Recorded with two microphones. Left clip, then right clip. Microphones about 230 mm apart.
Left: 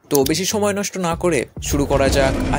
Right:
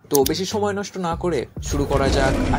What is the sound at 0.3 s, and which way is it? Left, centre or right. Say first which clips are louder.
Speech: left 3 dB; left.